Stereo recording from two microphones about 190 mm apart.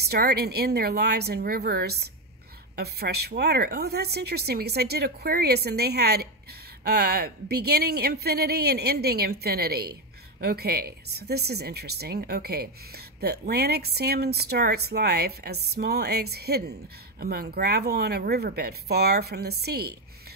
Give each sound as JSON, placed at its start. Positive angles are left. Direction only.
{"t": 0.0, "sound": "speech", "side_deg": -55}